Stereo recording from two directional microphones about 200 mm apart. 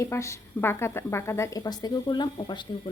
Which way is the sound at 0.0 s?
15° left (ahead or behind).